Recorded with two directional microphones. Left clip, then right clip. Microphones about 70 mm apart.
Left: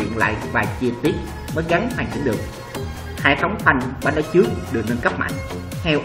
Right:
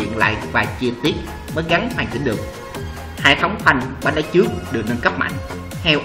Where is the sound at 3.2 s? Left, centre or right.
Centre.